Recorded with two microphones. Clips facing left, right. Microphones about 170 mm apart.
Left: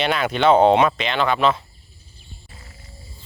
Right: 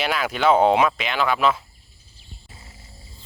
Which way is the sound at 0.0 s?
5° right (ahead or behind).